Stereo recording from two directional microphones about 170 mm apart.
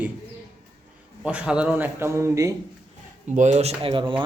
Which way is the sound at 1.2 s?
5° right (ahead or behind).